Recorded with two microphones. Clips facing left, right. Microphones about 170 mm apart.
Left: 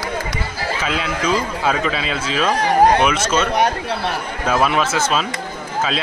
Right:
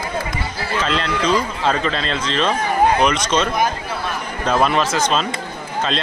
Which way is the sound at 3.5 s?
70° left (ahead or behind).